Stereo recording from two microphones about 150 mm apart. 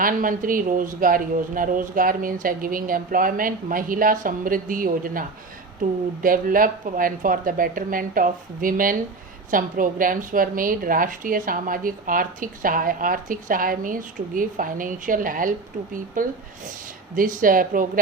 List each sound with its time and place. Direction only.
0.0 s speech: 65° right (ahead or behind)
6.2 s a woman's voice: 65° right (ahead or behind)